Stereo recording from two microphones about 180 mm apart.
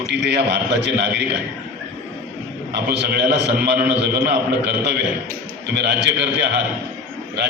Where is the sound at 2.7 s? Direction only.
65° right (ahead or behind).